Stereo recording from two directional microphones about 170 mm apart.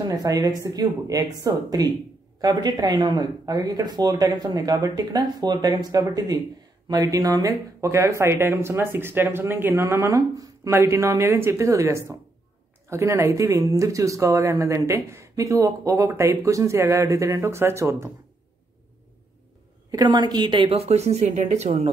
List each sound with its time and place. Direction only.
0.0 s speech: 20° right (ahead or behind)
19.9 s a woman's voice: 20° right (ahead or behind); by 21.8 s 40° right (ahead or behind)